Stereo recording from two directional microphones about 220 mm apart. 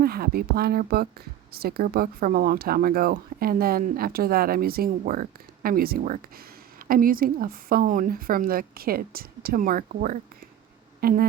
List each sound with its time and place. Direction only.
0.0 s speech: 45° right (ahead or behind)